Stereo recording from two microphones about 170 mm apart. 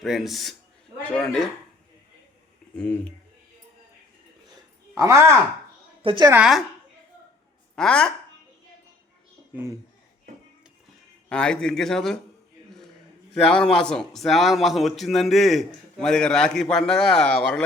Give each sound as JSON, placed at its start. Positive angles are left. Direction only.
{"t": 0.0, "sound": "a man's voice", "side_deg": 0}
{"t": 2.7, "sound": "speech", "side_deg": 5}
{"t": 4.9, "sound": "speech", "side_deg": -15}
{"t": 6.0, "sound": "a woman's voice", "side_deg": -30}
{"t": 6.3, "sound": "a man's voice", "side_deg": -5}
{"t": 7.8, "sound": "a man's voice", "side_deg": 5}
{"t": 11.3, "sound": "a man's voice", "side_deg": 5}
{"t": 13.3, "sound": "a man's voice", "side_deg": 5}